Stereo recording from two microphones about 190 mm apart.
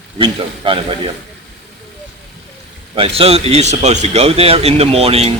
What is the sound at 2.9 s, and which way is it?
A man's voice, 30° right (ahead or behind).